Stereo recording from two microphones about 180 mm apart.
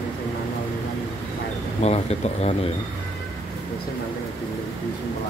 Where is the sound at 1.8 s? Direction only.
35° left (ahead or behind).